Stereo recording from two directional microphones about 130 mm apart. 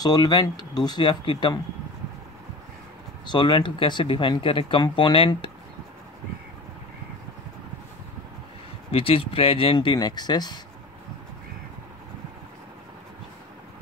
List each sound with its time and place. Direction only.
0.0 s speech: 30° left (ahead or behind)
3.3 s speech: 35° left (ahead or behind)
8.9 s speech: 45° left (ahead or behind)